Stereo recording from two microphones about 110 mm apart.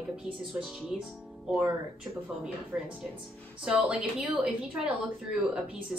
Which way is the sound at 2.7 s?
10° right (ahead or behind).